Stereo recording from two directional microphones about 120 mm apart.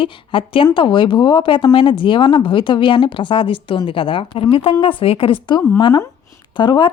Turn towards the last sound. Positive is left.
turn(degrees=40)  # may be behind; listen again after turning